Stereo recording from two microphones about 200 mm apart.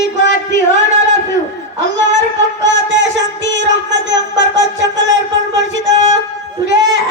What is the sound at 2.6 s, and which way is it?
Music, 65° right (ahead or behind).